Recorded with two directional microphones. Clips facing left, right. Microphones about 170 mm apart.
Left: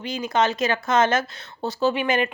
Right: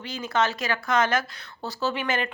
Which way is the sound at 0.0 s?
15° left (ahead or behind).